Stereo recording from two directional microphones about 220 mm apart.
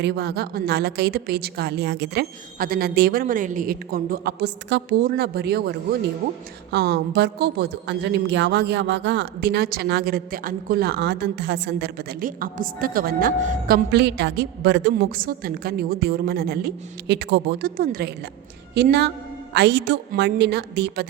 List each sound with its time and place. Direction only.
0.0 s a woman's voice: 50° right (ahead or behind)